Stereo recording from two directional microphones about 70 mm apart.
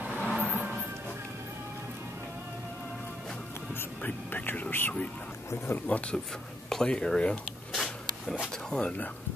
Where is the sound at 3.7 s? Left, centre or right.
Left.